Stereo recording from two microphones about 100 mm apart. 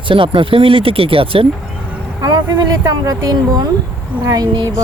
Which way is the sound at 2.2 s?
40° right (ahead or behind).